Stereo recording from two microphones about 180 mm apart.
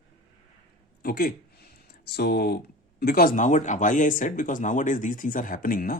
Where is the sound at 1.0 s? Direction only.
55° left (ahead or behind).